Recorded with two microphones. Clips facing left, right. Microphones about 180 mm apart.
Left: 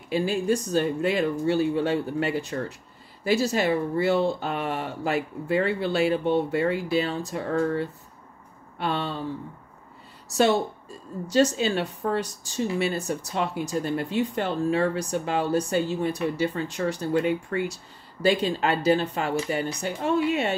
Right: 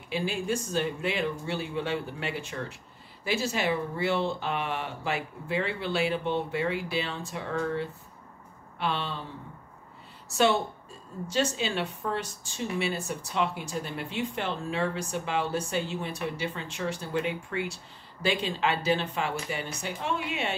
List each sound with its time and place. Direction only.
0.1 s a woman's voice: 40° left (ahead or behind)
10.3 s a woman's voice: 40° left (ahead or behind)